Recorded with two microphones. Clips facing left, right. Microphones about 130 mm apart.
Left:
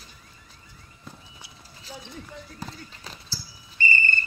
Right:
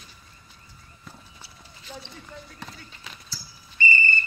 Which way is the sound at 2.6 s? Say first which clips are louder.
Left 3 dB; 30° left (ahead or behind).